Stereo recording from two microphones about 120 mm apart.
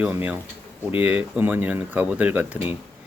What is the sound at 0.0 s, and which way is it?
Speech, 15° right (ahead or behind).